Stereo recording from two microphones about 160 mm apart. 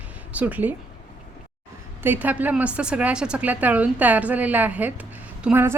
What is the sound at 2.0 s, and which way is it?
A woman's voice, 10° right (ahead or behind).